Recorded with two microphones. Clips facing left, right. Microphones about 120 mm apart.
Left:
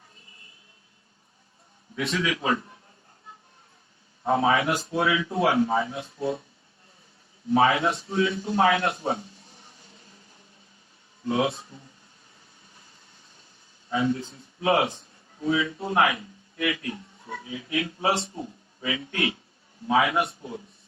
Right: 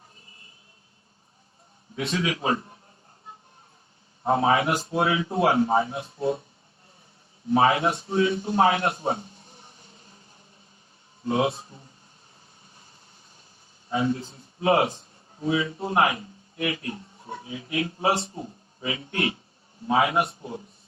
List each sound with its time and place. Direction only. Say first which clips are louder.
2.0 s a man's voice: even; 25° right (ahead or behind)
4.2 s a man's voice: right 1 dB; 25° right (ahead or behind)
7.5 s a man's voice: right 1 dB; 25° right (ahead or behind)
11.3 s a man's voice: right 1 dB; 25° right (ahead or behind)
13.9 s a man's voice: even; 30° right (ahead or behind)